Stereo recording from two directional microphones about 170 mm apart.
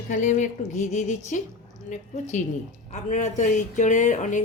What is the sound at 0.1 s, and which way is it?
Speech, 45° left (ahead or behind).